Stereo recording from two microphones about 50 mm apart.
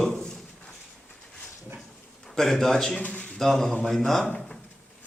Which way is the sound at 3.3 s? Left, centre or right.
Centre.